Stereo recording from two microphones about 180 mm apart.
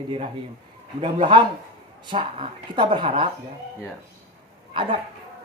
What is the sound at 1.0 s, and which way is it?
Speech, 30° right (ahead or behind).